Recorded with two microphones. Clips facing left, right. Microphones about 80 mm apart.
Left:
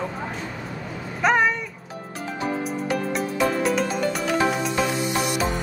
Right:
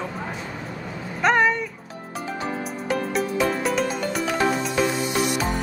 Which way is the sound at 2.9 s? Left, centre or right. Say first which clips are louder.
Right 4 dB; centre.